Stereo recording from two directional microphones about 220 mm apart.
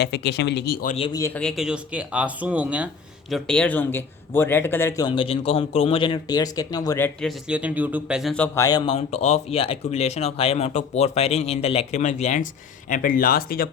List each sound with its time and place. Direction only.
0.0 s speech: 50° left (ahead or behind)
0.9 s speech: 25° left (ahead or behind)
1.2 s a man's voice: 5° left (ahead or behind); by 13.7 s 40° left (ahead or behind)